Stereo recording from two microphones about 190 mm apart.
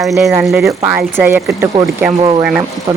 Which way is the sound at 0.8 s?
10° right (ahead or behind).